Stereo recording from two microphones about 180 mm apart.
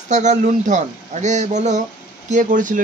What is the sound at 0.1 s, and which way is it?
Speech, 40° right (ahead or behind).